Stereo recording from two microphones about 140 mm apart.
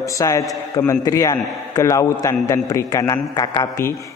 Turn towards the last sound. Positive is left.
turn(degrees=25)  # may be behind; listen again after turning